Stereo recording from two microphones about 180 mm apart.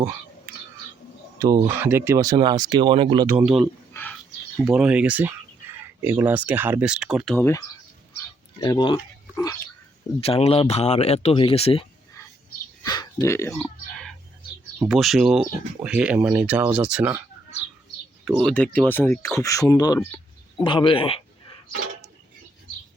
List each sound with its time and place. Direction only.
1.4 s speech: 20° right (ahead or behind)
3.2 s speech: 5° right (ahead or behind)
3.9 s whispering: 10° left (ahead or behind)
4.6 s speech: 5° right (ahead or behind)
7.3 s speech: 15° left (ahead or behind)
8.6 s speech: 25° left (ahead or behind)
9.3 s a sound: 20° left (ahead or behind)
10.2 s speech: 35° left (ahead or behind)
12.8 s a sound: 20° left (ahead or behind)
14.8 s speech: centre (ahead or behind)
18.4 s speech: 5° left (ahead or behind); by 21.2 s 30° left (ahead or behind)